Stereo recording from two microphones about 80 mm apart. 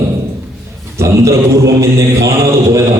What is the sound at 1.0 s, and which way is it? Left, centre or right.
A man's voice, right.